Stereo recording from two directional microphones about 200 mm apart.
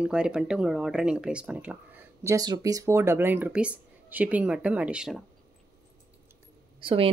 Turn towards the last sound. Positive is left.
turn(degrees=-25)  # may be behind; listen again after turning